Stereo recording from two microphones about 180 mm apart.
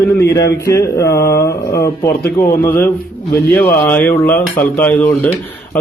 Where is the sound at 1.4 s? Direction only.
60° left (ahead or behind).